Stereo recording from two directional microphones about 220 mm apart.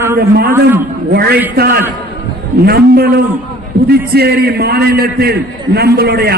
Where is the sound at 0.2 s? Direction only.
45° right (ahead or behind).